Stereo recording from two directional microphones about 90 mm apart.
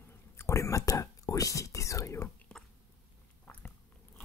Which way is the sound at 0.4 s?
35° left (ahead or behind).